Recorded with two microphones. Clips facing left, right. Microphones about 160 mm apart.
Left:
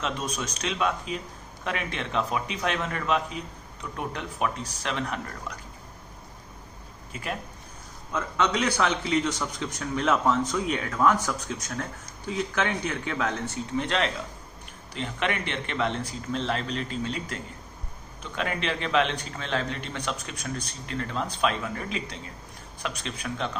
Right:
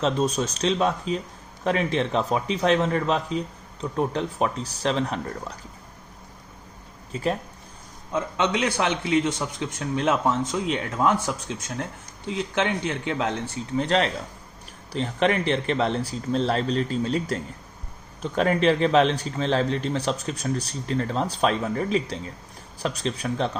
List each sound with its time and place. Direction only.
0.0 s a man's voice: 35° right (ahead or behind)
7.1 s speech: 30° right (ahead or behind)
8.6 s a man's voice: 25° right (ahead or behind)
13.7 s a man's voice: 35° right (ahead or behind)